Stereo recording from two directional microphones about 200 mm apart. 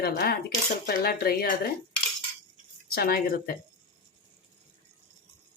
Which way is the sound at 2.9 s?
50° left (ahead or behind).